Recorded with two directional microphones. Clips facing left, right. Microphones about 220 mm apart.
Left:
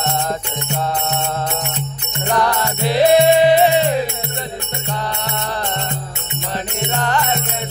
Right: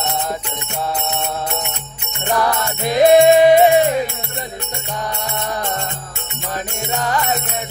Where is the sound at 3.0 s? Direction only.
45° right (ahead or behind).